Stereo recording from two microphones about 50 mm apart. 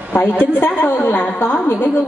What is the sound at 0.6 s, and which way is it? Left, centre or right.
Speech, left.